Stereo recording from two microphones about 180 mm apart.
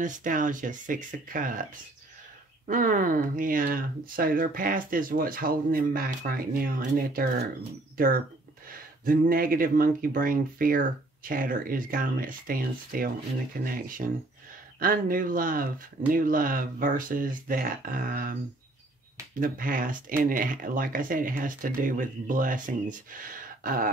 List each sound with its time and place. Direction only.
0.0 s speech: 45° right (ahead or behind)
2.6 s speech: 50° right (ahead or behind)
8.6 s speech: 55° right (ahead or behind)
19.4 s speech: 50° right (ahead or behind)